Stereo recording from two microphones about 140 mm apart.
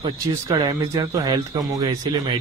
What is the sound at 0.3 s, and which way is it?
A man's voice, 25° right (ahead or behind).